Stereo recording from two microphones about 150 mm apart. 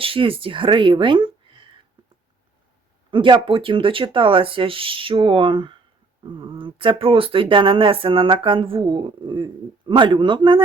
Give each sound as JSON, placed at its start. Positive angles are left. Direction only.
{"t": 0.0, "sound": "speech", "side_deg": -35}
{"t": 3.1, "sound": "speech", "side_deg": -35}